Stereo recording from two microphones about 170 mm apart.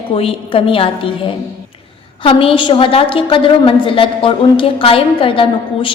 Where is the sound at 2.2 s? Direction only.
30° left (ahead or behind).